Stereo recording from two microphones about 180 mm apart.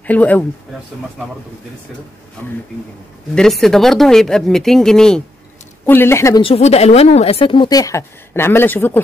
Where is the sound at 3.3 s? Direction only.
Centre (ahead or behind).